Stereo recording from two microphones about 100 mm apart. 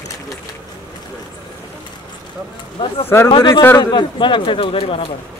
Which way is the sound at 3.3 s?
55° left (ahead or behind).